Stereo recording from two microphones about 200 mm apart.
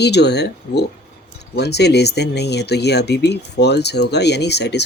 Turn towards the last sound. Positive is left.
turn(degrees=55)  # may be behind; listen again after turning